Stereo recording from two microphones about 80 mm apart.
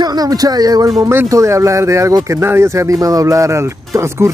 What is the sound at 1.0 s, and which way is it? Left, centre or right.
Speech, right.